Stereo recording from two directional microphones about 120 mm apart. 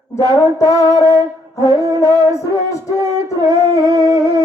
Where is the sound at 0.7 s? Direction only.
30° right (ahead or behind).